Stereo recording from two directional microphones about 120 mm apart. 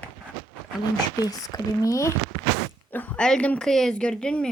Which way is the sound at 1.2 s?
30° left (ahead or behind).